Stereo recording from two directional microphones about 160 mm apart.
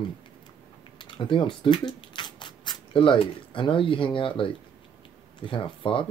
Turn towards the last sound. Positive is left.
turn(degrees=35)  # may be behind; listen again after turning